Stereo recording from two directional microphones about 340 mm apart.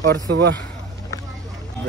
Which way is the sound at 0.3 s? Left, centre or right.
Right.